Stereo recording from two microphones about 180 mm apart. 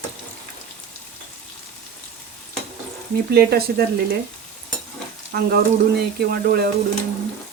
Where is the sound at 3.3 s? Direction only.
60° right (ahead or behind).